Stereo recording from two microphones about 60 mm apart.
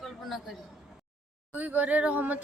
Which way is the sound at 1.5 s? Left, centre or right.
Right.